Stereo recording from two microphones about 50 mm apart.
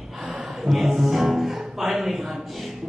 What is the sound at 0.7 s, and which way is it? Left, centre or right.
Music, centre.